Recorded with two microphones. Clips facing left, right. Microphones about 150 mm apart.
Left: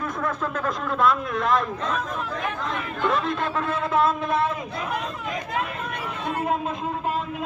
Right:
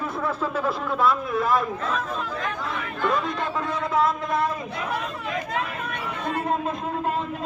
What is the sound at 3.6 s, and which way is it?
Speech, 5° left (ahead or behind).